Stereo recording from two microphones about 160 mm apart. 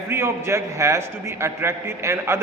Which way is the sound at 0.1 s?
15° right (ahead or behind).